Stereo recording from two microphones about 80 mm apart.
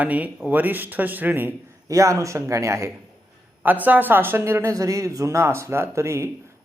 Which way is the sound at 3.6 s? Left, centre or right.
Right.